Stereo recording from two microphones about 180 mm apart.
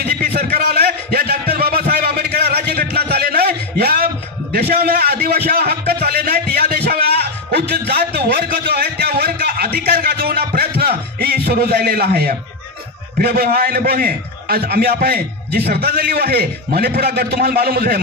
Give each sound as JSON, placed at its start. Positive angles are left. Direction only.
{"t": 0.0, "sound": "a sound", "side_deg": -60}
{"t": 9.8, "sound": "music", "side_deg": -60}
{"t": 13.2, "sound": "a man's voice", "side_deg": -55}